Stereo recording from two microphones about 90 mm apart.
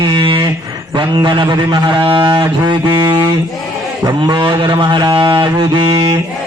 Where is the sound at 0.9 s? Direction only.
65° right (ahead or behind).